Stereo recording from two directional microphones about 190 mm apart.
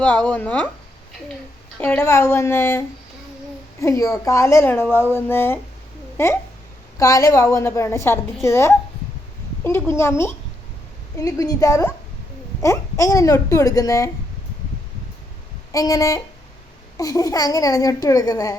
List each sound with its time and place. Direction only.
0.0 s a woman's voice: 10° left (ahead or behind)
1.8 s a woman's voice: 10° left (ahead or behind)
15.7 s a woman's voice: 15° left (ahead or behind)